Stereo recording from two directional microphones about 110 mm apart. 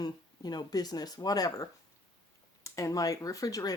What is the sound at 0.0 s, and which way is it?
Speech, 40° left (ahead or behind).